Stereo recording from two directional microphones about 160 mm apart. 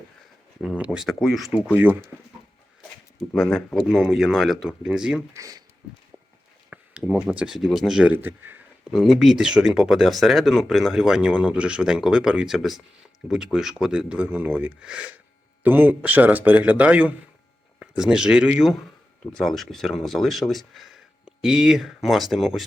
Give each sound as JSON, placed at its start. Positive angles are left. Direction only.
{"t": 0.6, "sound": "speech", "side_deg": -5}
{"t": 3.2, "sound": "speech", "side_deg": 5}
{"t": 5.3, "sound": "speech", "side_deg": -20}
{"t": 6.7, "sound": "speech", "side_deg": -5}
{"t": 8.9, "sound": "speech", "side_deg": 0}